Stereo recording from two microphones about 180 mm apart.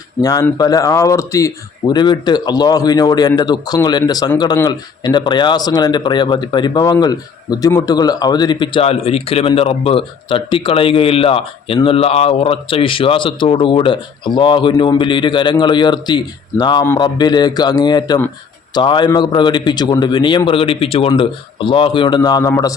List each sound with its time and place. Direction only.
0.2 s speech: 20° left (ahead or behind)